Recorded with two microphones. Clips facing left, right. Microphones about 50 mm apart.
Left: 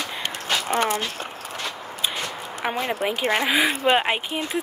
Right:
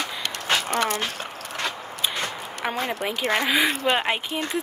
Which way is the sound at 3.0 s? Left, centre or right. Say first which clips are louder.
Left 2 dB; centre.